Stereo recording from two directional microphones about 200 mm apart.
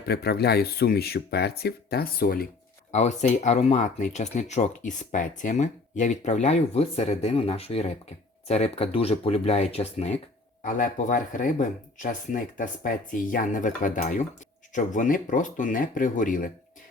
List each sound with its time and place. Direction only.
0.1 s speech: 50° left (ahead or behind)
2.9 s speech: 35° left (ahead or behind)
10.6 s speech: 40° left (ahead or behind)